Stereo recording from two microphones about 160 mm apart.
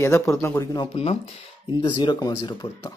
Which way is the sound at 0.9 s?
40° left (ahead or behind).